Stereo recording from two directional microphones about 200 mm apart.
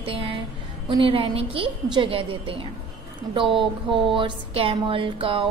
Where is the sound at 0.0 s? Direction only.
25° right (ahead or behind).